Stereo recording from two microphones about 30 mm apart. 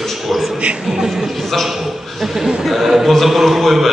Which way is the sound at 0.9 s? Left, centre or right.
Centre.